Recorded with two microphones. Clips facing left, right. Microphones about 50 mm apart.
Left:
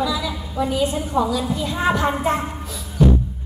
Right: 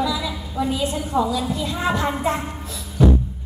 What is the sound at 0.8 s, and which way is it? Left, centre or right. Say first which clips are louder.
A woman's voice: left 2 dB; left.